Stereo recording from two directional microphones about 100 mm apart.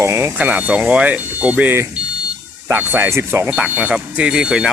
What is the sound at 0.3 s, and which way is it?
Speech, 15° right (ahead or behind).